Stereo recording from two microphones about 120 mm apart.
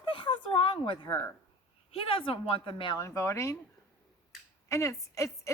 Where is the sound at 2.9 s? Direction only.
25° left (ahead or behind).